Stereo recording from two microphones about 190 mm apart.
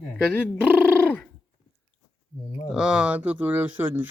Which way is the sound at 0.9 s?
10° left (ahead or behind).